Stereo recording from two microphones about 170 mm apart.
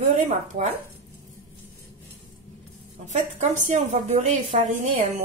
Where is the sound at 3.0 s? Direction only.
45° right (ahead or behind).